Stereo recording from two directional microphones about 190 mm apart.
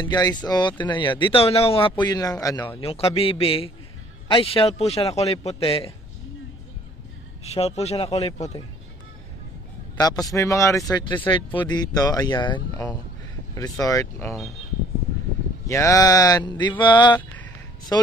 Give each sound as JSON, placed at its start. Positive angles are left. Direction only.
{"t": 0.0, "sound": "speech", "side_deg": 20}
{"t": 2.8, "sound": "a man's voice", "side_deg": 30}
{"t": 7.4, "sound": "a man's voice", "side_deg": 35}
{"t": 9.9, "sound": "speech", "side_deg": 20}
{"t": 15.6, "sound": "speech", "side_deg": 15}